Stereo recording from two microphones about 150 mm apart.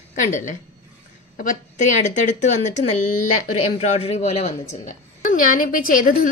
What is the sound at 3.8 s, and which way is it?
A woman's voice, 45° left (ahead or behind).